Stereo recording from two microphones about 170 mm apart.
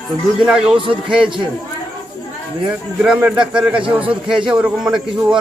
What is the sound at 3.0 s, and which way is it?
A man's voice, 5° right (ahead or behind).